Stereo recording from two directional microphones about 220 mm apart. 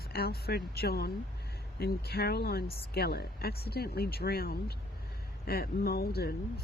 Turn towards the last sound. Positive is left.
turn(degrees=45)  # may be behind; listen again after turning